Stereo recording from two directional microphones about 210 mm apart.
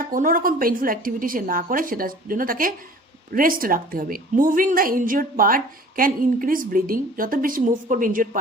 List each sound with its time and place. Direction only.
0.1 s a woman's voice: 40° right (ahead or behind)